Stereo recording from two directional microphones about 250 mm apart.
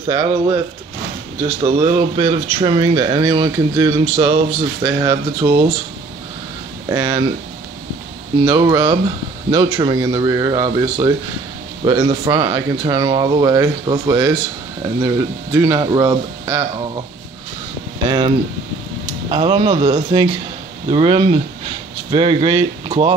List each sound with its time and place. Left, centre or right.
0.1 s speech: centre
1.6 s speech: centre
6.9 s speech: centre
8.4 s speech: centre
18.0 s speech: centre